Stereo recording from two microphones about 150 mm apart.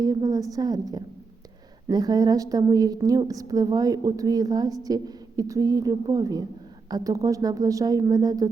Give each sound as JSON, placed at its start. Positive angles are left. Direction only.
{"t": 0.0, "sound": "a woman's voice", "side_deg": -25}